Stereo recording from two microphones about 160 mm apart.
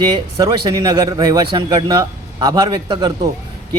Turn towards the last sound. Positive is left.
turn(degrees=-25)  # may be behind; listen again after turning